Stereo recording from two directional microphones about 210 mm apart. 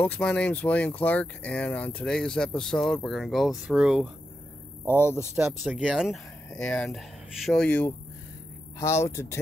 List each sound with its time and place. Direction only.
0.0 s speech: 5° left (ahead or behind)
5.6 s speech: centre (ahead or behind)